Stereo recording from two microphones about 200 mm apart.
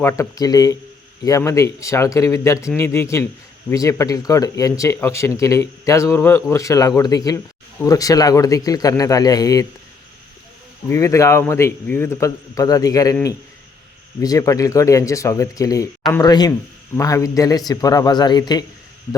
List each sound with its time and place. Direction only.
0.0 s speech: 15° left (ahead or behind)
10.8 s speech: 15° left (ahead or behind)
14.2 s speech: 15° left (ahead or behind)